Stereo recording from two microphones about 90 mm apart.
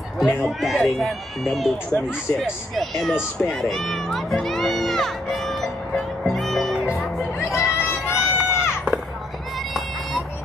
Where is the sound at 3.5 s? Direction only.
5° left (ahead or behind).